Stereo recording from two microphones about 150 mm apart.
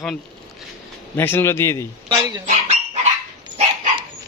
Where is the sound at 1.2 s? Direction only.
15° left (ahead or behind).